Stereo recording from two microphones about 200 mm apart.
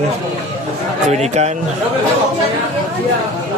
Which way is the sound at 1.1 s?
35° right (ahead or behind).